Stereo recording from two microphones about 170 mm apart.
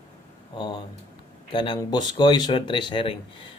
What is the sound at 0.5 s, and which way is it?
A man's voice, 25° left (ahead or behind).